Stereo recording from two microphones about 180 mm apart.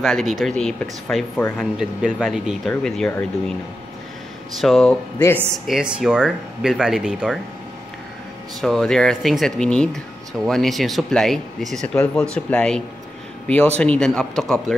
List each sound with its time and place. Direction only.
0.0 s speech: centre (ahead or behind)
1.6 s speech: 5° right (ahead or behind)
4.6 s speech: centre (ahead or behind)
8.5 s speech: centre (ahead or behind)